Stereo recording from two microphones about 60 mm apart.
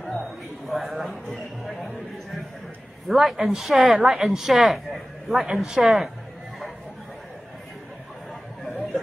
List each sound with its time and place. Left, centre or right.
0.0 s speech: centre